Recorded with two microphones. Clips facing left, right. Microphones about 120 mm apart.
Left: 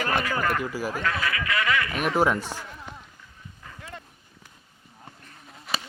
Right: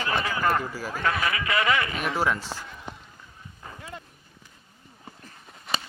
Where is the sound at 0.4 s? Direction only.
30° right (ahead or behind).